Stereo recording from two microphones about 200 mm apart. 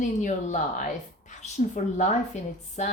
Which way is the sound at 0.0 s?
40° left (ahead or behind).